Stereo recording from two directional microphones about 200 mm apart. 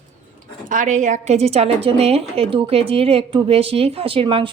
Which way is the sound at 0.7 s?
40° right (ahead or behind).